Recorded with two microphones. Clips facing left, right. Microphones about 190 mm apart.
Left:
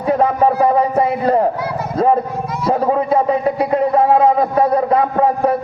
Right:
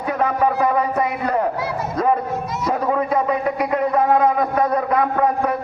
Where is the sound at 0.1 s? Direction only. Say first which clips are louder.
Left 5 dB; 30° left (ahead or behind).